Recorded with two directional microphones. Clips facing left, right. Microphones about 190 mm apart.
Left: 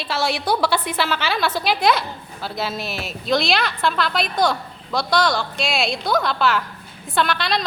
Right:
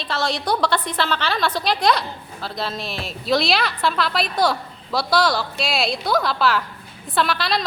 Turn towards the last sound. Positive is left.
turn(degrees=0)  # may be behind; listen again after turning